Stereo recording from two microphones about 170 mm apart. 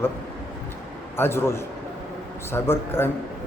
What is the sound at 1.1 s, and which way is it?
A man's voice, 15° left (ahead or behind).